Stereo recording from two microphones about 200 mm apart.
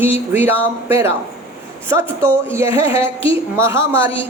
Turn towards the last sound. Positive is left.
turn(degrees=-15)  # may be behind; listen again after turning